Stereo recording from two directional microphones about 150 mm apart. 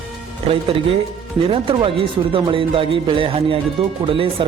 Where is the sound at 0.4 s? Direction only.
40° right (ahead or behind).